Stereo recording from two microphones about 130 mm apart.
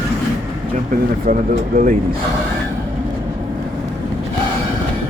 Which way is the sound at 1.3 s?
90° right.